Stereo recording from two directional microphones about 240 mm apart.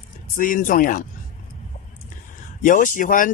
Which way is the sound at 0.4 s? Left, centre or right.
Left.